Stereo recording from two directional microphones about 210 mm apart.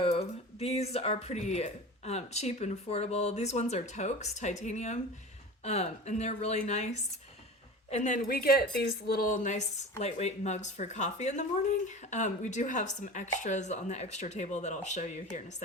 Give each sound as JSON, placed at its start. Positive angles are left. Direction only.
{"t": 0.0, "sound": "speech", "side_deg": 30}